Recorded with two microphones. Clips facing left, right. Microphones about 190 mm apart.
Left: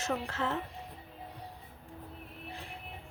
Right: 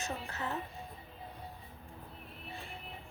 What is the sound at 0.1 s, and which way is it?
Speech, 85° left.